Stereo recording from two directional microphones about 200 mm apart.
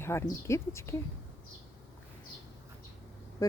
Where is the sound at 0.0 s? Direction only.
15° left (ahead or behind).